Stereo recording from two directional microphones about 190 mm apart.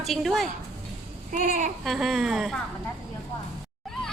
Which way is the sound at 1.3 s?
45° right (ahead or behind).